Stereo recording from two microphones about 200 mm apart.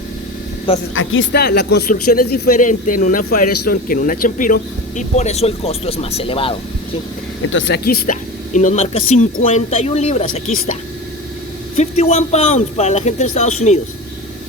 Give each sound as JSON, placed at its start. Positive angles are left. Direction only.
{"t": 0.9, "sound": "speech", "side_deg": 75}
{"t": 7.5, "sound": "speech", "side_deg": 70}
{"t": 7.9, "sound": "speech", "side_deg": 40}
{"t": 11.8, "sound": "speech", "side_deg": 30}